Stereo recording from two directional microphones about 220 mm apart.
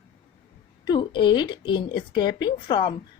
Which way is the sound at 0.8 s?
20° left (ahead or behind).